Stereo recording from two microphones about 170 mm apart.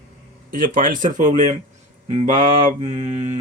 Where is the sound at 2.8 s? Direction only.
40° right (ahead or behind).